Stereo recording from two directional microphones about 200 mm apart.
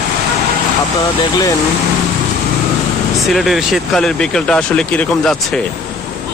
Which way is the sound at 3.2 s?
Centre (ahead or behind).